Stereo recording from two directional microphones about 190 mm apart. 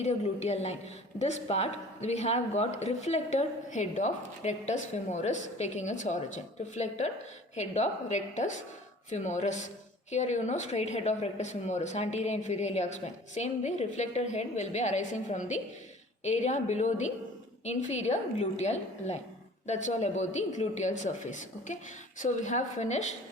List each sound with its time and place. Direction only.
0.0 s speech: 35° left (ahead or behind)